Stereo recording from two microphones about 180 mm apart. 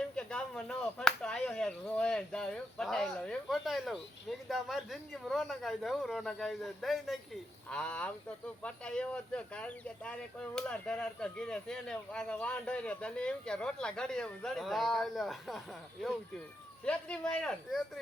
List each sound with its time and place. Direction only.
0.2 s speech: 5° left (ahead or behind)